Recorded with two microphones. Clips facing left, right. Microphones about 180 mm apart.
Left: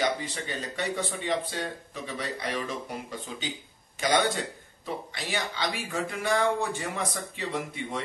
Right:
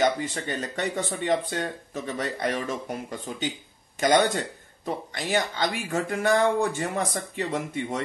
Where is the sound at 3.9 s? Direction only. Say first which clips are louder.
Right 4 dB; 45° right (ahead or behind).